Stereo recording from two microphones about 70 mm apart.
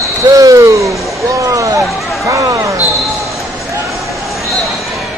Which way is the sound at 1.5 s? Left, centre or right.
Right.